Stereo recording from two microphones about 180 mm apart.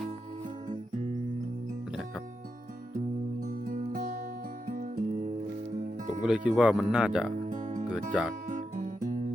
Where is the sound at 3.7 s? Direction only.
45° right (ahead or behind).